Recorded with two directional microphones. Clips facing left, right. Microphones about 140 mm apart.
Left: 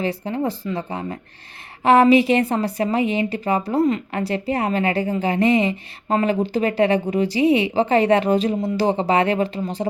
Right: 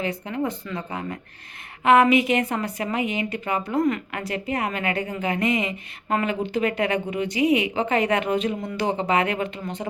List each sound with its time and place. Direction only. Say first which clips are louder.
0.0 s a woman's voice: left 4 dB; 30° left (ahead or behind)